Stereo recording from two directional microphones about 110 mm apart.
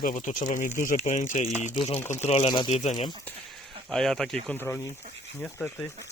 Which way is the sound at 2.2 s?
75° left (ahead or behind).